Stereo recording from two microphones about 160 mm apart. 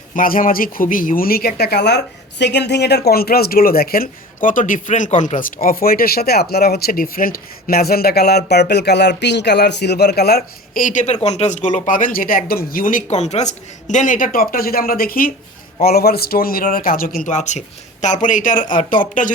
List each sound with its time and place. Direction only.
0.1 s speech: 60° left (ahead or behind); by 10.8 s 80° left
10.8 s speech: 50° left (ahead or behind); by 17.1 s 65° left (ahead or behind)
17.2 s speech: 50° left (ahead or behind)